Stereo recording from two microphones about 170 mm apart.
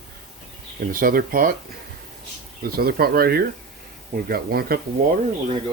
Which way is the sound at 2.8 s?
65° right (ahead or behind).